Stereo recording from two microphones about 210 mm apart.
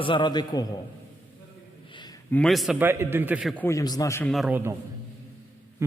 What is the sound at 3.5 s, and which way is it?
Speech, 10° left (ahead or behind).